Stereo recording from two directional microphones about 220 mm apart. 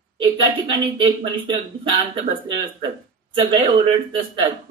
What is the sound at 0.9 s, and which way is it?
A man's voice, 20° right (ahead or behind).